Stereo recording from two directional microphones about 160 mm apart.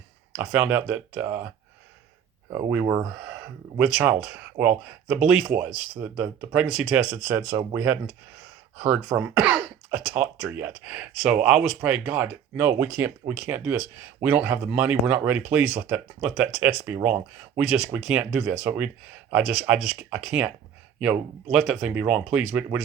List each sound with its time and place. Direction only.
0.3 s speech: 10° right (ahead or behind)
2.5 s speech: 20° right (ahead or behind)
3.8 s speech: 5° right (ahead or behind)
21.5 s speech: 5° right (ahead or behind)